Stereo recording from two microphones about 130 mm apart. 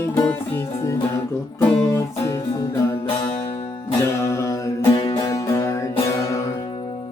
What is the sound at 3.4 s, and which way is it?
Music, 50° left (ahead or behind).